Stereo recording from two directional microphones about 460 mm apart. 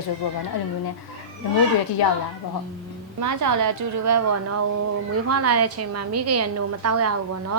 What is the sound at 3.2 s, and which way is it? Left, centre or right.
A woman's voice, right.